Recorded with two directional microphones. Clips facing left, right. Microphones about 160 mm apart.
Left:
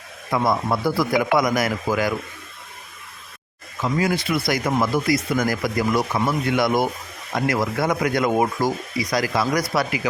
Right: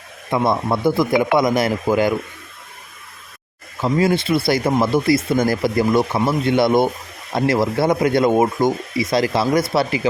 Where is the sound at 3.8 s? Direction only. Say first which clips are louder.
Right 5 dB; 30° right (ahead or behind).